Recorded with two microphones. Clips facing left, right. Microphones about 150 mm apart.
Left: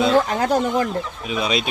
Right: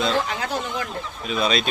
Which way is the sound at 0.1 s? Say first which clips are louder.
Left 7 dB; 45° left (ahead or behind).